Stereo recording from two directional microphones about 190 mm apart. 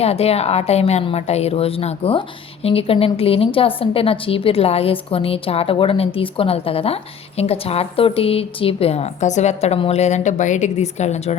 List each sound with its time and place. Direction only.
0.0 s a woman's voice: 30° left (ahead or behind)